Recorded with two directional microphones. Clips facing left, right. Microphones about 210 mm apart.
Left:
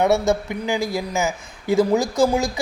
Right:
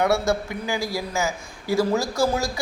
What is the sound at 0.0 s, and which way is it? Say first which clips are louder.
Speech: left 3 dB; 20° left (ahead or behind).